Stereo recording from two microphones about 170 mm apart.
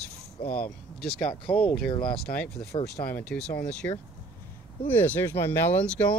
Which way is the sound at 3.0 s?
10° left (ahead or behind).